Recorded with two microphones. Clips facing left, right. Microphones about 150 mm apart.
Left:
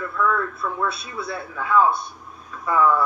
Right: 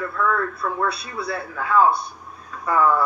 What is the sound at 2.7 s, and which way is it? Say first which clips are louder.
Speech: even; 30° right (ahead or behind).